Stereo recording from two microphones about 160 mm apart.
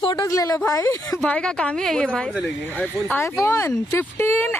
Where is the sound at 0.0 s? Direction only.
30° left (ahead or behind).